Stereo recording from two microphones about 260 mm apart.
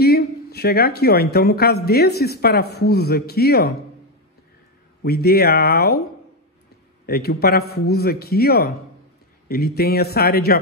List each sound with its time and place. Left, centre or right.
0.0 s a woman's voice: left
5.0 s a woman's voice: left
7.1 s a woman's voice: left